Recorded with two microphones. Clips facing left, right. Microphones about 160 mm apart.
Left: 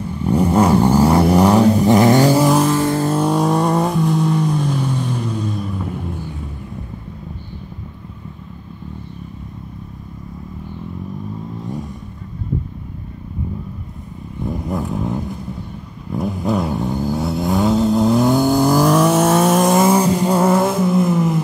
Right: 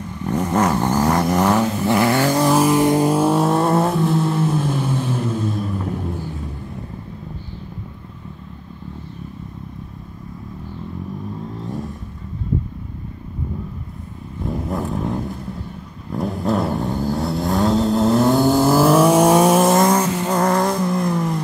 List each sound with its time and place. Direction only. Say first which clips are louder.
0.0 s vehicle: left 5 dB; 10° left (ahead or behind)
2.3 s vehicle: left 2 dB; centre (ahead or behind)
2.6 s vehicle: right 2 dB; 15° right (ahead or behind); by 6.0 s centre (ahead or behind)
11.6 s vehicle: even; centre (ahead or behind)
14.4 s vehicle: left 1 dB; centre (ahead or behind)